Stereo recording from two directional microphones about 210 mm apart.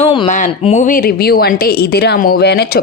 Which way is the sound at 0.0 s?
25° left (ahead or behind).